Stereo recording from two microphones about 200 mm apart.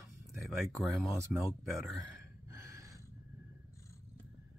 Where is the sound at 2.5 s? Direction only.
15° right (ahead or behind).